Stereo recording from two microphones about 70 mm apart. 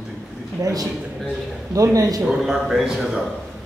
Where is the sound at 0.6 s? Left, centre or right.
Right.